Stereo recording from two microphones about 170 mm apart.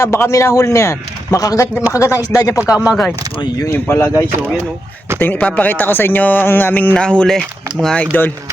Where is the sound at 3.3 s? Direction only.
25° left (ahead or behind).